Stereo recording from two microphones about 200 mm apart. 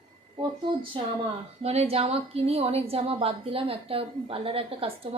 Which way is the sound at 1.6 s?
30° right (ahead or behind).